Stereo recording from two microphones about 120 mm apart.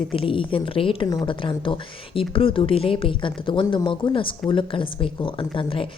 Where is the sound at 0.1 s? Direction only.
45° left (ahead or behind).